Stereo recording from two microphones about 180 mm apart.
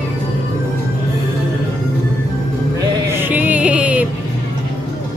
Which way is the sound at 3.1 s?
10° right (ahead or behind).